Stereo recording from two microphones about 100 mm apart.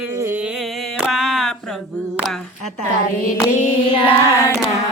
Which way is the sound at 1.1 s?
Centre (ahead or behind).